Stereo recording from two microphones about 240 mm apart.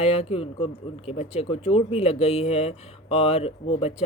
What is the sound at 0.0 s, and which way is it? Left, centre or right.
Speech, left.